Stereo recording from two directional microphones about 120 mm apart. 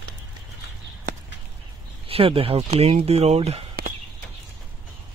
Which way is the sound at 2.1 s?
50° right (ahead or behind).